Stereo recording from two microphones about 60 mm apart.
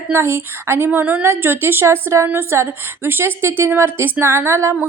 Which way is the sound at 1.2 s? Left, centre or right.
Right.